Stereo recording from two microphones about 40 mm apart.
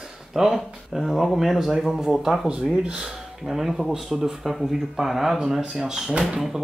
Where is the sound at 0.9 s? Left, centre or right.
Centre.